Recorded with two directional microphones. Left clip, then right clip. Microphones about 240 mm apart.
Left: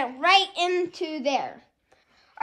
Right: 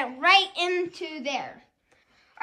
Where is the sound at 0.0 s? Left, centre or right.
Centre.